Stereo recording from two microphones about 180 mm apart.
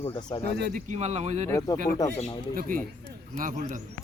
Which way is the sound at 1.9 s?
20° left (ahead or behind).